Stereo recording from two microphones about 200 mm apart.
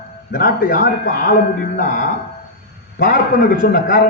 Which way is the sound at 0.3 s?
45° left (ahead or behind).